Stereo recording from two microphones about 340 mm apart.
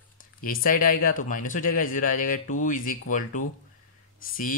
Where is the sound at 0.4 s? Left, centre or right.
Left.